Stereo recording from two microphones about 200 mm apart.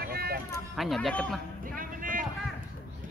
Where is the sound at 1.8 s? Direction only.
45° right (ahead or behind).